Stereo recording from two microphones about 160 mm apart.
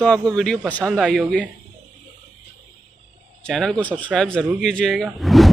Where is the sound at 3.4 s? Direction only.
5° left (ahead or behind).